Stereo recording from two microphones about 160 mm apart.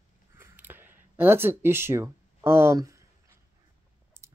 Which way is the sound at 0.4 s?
10° right (ahead or behind).